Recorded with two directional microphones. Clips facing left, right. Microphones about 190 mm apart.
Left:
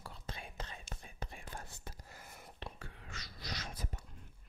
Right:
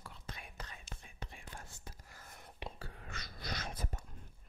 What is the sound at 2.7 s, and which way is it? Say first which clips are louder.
Whispering: right 2 dB; 35° right (ahead or behind).